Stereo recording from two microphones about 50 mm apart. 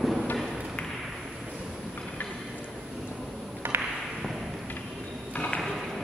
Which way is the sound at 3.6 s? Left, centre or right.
Right.